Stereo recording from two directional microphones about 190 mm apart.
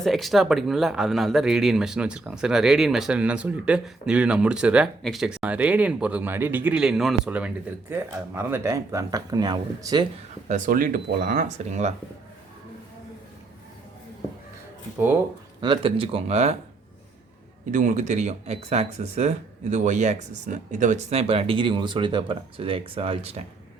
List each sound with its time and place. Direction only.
0.0 s speech: centre (ahead or behind); by 10.1 s 20° right (ahead or behind)
10.5 s speech: 45° right (ahead or behind)
15.6 s speech: 25° right (ahead or behind)
17.7 s speech: 40° right (ahead or behind)